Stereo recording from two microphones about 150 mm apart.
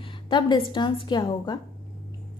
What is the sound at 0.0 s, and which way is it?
A woman's voice, 30° left (ahead or behind).